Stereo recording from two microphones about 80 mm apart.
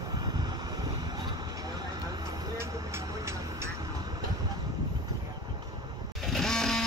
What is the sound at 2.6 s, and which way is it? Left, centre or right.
Vehicle, right.